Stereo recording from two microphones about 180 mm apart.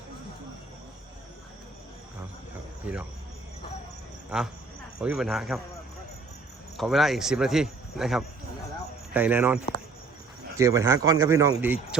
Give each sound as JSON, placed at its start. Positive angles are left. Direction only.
{"t": 2.8, "sound": "speech", "side_deg": -10}
{"t": 4.3, "sound": "speech", "side_deg": -5}
{"t": 6.7, "sound": "speech", "side_deg": 0}
{"t": 10.6, "sound": "speech", "side_deg": -15}